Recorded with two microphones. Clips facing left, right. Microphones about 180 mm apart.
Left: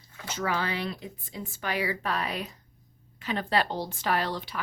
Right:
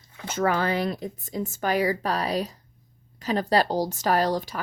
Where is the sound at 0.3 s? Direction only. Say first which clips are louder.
Right 6 dB; 50° right (ahead or behind).